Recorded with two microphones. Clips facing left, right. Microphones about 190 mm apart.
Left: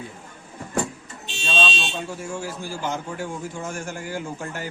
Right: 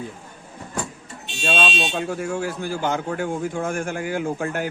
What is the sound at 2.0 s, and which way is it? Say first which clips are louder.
A man's voice: right 6 dB; 60° right (ahead or behind).